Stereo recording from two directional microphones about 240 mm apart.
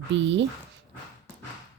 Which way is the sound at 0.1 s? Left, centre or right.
Right.